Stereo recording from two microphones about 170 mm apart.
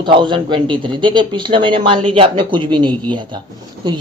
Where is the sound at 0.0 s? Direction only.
30° right (ahead or behind).